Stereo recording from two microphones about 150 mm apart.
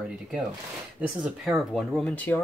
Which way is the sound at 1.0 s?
5° right (ahead or behind).